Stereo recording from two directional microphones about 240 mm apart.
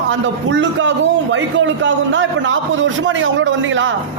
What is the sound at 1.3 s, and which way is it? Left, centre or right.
A man's voice, right.